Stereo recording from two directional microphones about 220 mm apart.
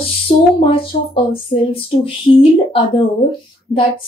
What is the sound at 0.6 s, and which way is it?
A woman's voice, 25° left (ahead or behind).